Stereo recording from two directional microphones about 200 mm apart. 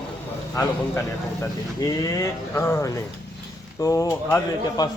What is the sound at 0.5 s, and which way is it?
A man's voice, 10° left (ahead or behind).